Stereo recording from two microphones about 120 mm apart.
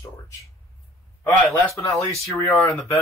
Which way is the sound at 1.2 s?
15° left (ahead or behind).